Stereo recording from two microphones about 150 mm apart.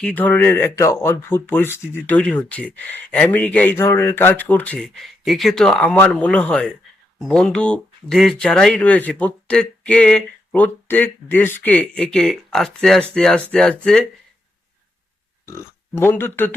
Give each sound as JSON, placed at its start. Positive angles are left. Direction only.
{"t": 0.0, "sound": "speech", "side_deg": 10}
{"t": 5.0, "sound": "speech", "side_deg": 0}
{"t": 15.4, "sound": "speech", "side_deg": 15}